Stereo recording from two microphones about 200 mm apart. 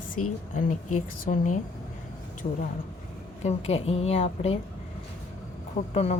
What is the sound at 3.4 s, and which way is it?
A woman's voice, 30° left (ahead or behind).